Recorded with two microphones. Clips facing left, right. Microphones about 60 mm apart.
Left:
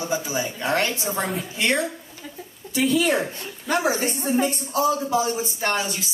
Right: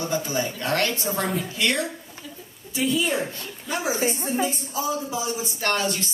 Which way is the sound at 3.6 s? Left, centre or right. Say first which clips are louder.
Left 3 dB; left.